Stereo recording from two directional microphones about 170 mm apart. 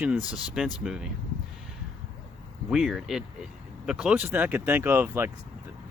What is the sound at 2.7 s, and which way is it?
Speech, centre (ahead or behind).